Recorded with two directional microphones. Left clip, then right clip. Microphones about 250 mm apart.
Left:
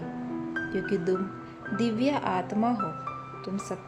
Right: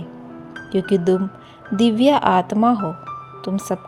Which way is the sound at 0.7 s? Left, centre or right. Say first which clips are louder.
Right 12 dB; right.